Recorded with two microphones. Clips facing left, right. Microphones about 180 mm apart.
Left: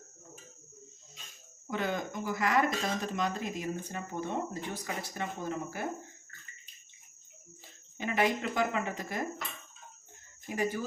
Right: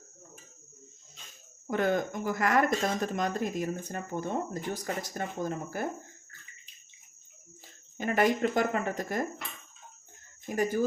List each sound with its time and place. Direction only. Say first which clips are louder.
1.7 s speech: right 6 dB; 50° right (ahead or behind)
7.9 s speech: right 3 dB; 45° right (ahead or behind)
10.5 s speech: right 3 dB; 45° right (ahead or behind)